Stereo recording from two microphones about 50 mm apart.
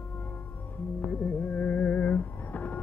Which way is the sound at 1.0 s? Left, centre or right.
Left.